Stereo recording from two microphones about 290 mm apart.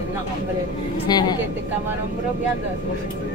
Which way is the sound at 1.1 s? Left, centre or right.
Centre.